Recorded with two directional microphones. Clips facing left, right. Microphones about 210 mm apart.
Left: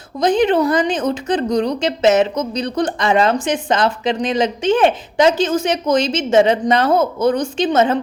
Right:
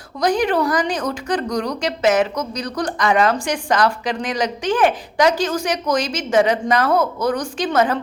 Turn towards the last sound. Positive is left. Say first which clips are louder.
# left 3 dB
turn(degrees=25)  # may be behind; listen again after turning